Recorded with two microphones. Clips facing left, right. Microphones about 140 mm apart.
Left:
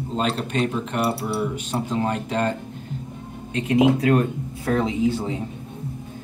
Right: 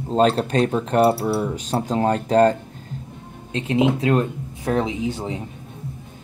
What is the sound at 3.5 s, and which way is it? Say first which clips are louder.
Speech: left 1 dB; 30° right (ahead or behind).